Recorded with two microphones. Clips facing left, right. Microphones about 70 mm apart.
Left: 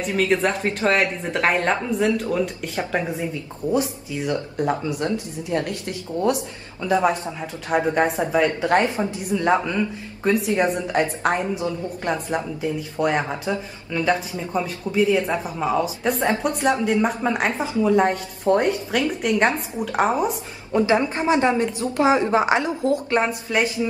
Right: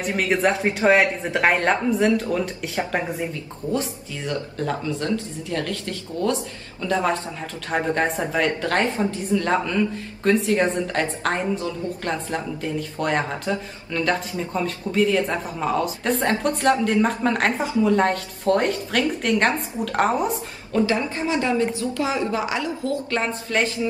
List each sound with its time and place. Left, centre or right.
0.1 s a woman's voice: centre
4.3 s a woman's voice: centre
20.7 s a woman's voice: left